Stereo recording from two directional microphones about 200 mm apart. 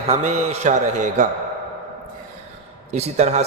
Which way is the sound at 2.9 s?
35° right (ahead or behind).